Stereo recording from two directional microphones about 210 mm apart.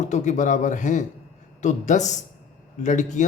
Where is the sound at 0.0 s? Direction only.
35° left (ahead or behind).